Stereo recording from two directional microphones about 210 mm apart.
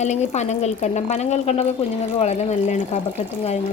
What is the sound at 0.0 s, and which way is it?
A woman's voice, 35° left (ahead or behind).